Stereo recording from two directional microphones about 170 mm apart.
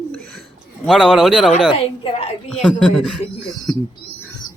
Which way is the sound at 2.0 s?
35° left (ahead or behind).